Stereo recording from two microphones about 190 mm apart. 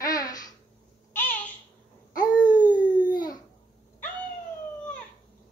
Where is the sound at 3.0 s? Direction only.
20° left (ahead or behind).